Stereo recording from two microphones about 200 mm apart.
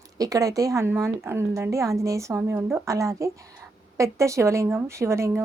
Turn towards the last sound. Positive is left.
turn(degrees=-15)  # may be behind; listen again after turning